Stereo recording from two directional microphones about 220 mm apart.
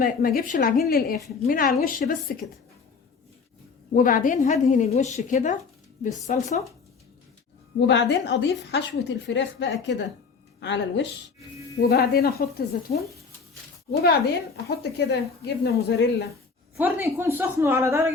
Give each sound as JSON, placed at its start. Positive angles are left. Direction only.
{"t": 0.0, "sound": "a woman's voice", "side_deg": 40}
{"t": 3.9, "sound": "a woman's voice", "side_deg": 35}
{"t": 7.8, "sound": "a woman's voice", "side_deg": 50}
{"t": 16.7, "sound": "a woman's voice", "side_deg": -10}